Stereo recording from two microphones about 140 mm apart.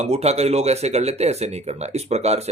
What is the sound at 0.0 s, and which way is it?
Speech, 50° right (ahead or behind).